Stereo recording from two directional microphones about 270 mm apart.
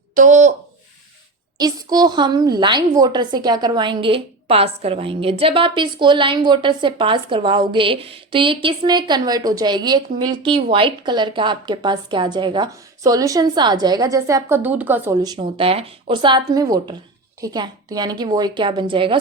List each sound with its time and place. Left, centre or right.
0.1 s speech: right
1.5 s a woman's voice: centre